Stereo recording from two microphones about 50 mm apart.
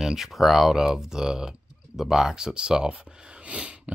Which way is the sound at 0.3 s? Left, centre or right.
Centre.